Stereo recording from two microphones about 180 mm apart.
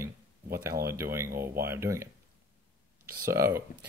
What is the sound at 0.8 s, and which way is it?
Speech, 15° right (ahead or behind).